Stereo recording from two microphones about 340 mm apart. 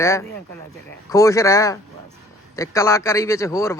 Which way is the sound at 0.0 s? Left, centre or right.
Centre.